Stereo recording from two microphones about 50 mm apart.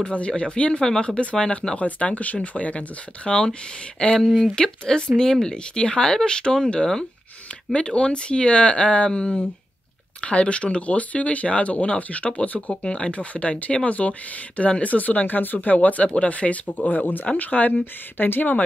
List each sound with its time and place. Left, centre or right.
0.0 s speech: left
1.8 s speech: left
3.3 s speech: centre; by 18.6 s left